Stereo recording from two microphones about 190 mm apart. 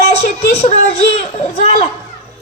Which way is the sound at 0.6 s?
35° left (ahead or behind).